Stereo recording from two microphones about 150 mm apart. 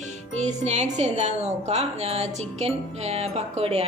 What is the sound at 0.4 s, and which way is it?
A woman's voice, 50° right (ahead or behind).